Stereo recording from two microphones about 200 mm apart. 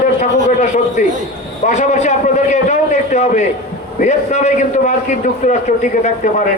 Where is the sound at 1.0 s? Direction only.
35° left (ahead or behind).